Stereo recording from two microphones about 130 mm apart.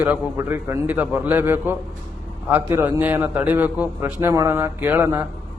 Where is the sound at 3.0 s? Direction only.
10° right (ahead or behind).